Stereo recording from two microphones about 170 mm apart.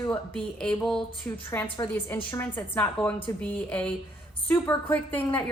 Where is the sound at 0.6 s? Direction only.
5° left (ahead or behind).